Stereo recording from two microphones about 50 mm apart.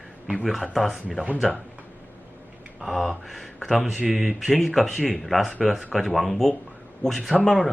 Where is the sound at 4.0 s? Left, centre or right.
Centre.